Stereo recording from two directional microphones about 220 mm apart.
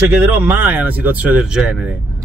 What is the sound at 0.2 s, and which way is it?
Speech, 10° right (ahead or behind).